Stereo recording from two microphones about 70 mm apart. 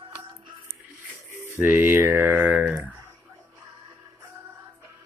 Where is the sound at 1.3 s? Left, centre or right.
Right.